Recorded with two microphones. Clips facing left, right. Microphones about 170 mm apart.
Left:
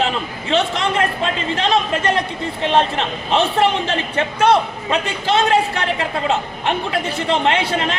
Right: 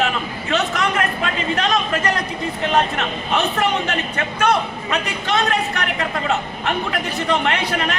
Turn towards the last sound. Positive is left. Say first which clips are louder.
# left 3 dB
turn(degrees=30)  # may be behind; listen again after turning